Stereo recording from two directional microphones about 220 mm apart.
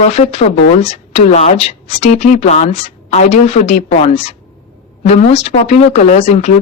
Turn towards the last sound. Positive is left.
turn(degrees=25)  # may be behind; listen again after turning